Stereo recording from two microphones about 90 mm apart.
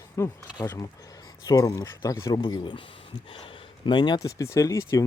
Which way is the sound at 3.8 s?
55° left (ahead or behind).